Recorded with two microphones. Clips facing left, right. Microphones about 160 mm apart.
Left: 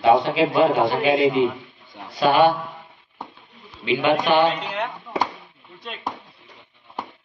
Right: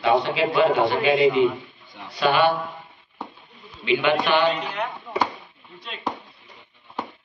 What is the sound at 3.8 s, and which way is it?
Speech, 45° left (ahead or behind).